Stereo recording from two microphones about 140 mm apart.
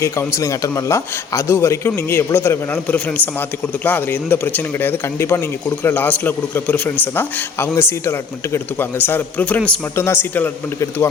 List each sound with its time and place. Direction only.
0.0 s a man's voice: 20° left (ahead or behind)